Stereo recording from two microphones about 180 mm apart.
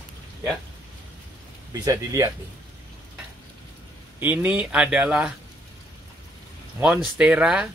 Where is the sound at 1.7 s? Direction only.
20° right (ahead or behind).